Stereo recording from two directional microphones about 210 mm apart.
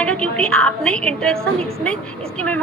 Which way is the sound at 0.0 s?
5° left (ahead or behind).